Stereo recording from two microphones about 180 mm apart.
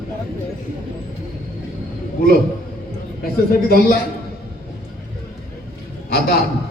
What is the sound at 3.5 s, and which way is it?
Speech, 55° left (ahead or behind).